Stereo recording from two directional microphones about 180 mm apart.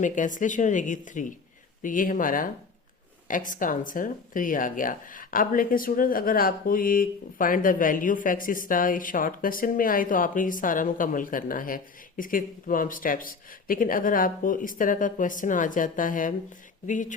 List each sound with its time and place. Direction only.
0.0 s speech: 45° left (ahead or behind)